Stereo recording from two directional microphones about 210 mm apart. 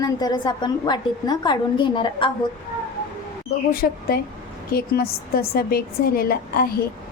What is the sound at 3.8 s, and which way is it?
A woman's voice, 45° left (ahead or behind).